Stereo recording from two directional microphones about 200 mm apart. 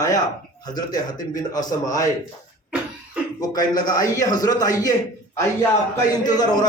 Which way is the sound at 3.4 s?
20° left (ahead or behind).